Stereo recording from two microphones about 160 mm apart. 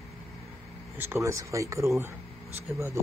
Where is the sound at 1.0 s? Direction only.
15° right (ahead or behind).